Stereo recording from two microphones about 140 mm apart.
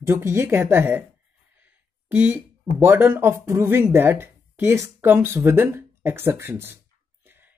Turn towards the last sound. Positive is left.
turn(degrees=-15)  # may be behind; listen again after turning